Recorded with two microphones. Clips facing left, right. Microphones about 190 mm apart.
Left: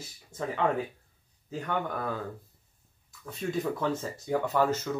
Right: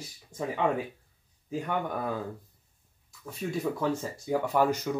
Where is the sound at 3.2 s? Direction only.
10° right (ahead or behind).